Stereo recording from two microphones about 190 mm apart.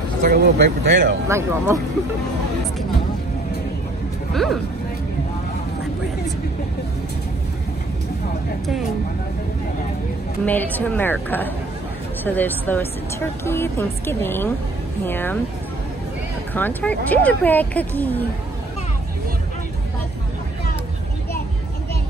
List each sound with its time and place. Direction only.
0.2 s speech: 55° right (ahead or behind)
1.7 s speech: 15° right (ahead or behind)
4.3 s speech: centre (ahead or behind)
10.4 s speech: 10° left (ahead or behind)
16.5 s speech: 10° left (ahead or behind)